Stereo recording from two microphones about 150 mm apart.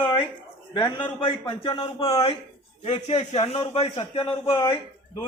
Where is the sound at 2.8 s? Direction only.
50° left (ahead or behind).